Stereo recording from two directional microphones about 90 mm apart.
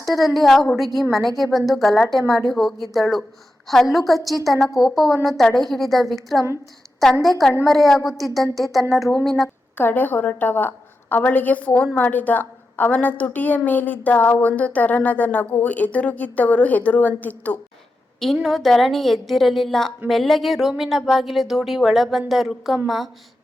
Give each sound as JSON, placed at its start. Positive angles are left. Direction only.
{"t": 0.2, "sound": "a woman's voice", "side_deg": 0}
{"t": 9.7, "sound": "a woman's voice", "side_deg": 20}
{"t": 18.4, "sound": "a woman's voice", "side_deg": 0}